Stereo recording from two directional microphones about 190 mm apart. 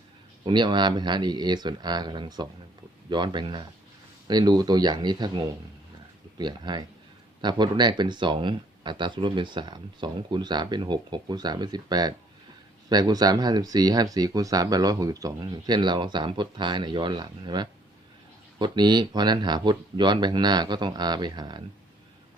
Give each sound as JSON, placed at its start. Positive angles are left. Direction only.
{"t": 0.4, "sound": "speech", "side_deg": -25}